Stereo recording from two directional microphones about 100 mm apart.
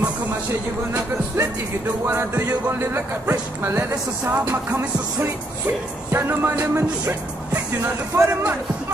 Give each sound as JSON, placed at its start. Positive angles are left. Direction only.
{"t": 0.9, "sound": "music", "side_deg": -25}